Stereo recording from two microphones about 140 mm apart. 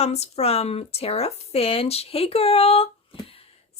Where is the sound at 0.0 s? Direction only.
50° left (ahead or behind).